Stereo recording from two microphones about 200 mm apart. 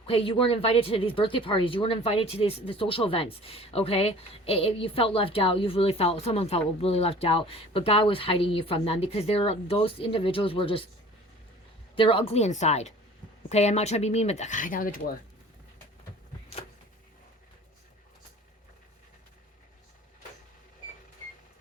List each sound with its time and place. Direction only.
0.0 s speech: 25° left (ahead or behind)
11.9 s speech: 25° left (ahead or behind); by 15.1 s 45° left (ahead or behind)